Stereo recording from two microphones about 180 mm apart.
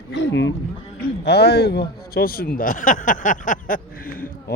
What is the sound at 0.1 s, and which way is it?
Speech, 75° left (ahead or behind).